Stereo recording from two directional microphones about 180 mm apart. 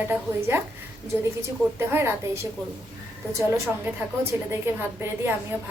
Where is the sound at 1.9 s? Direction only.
15° right (ahead or behind).